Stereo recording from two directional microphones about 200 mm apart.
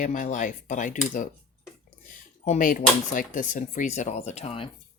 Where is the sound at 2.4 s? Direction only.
40° left (ahead or behind).